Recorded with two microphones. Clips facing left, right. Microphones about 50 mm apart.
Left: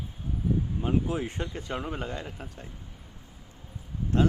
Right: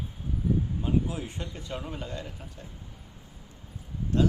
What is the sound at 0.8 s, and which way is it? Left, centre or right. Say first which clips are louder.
Speech: left 3 dB; left.